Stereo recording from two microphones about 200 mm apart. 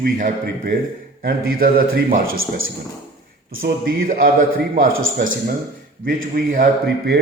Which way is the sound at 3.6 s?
45° right (ahead or behind).